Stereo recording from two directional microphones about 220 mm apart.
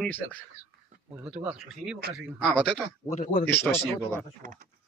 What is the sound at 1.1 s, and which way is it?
Speech, 5° right (ahead or behind).